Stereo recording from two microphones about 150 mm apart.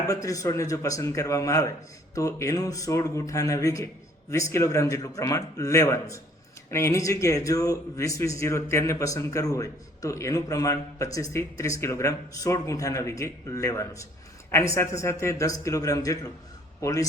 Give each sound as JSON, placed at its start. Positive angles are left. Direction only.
{"t": 0.1, "sound": "speech", "side_deg": 20}